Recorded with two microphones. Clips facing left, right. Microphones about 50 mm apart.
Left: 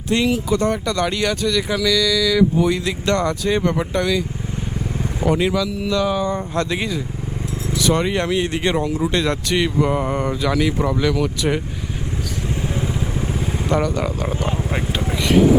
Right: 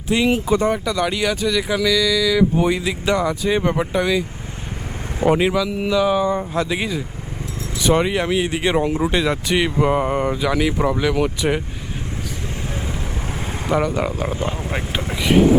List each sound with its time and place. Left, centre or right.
0.3 s speech: right
0.6 s speech: centre
2.8 s speech: centre
5.2 s speech: right
7.8 s speech: right
8.0 s speech: centre
8.8 s speech: right
9.1 s speech: centre
13.7 s speech: centre
14.4 s vehicle: centre
14.9 s vehicle: centre